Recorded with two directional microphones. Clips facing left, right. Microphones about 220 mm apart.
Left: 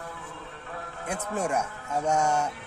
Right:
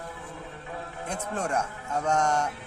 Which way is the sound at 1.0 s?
5° left (ahead or behind).